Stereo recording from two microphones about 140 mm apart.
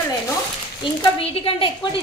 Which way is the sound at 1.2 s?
40° left (ahead or behind).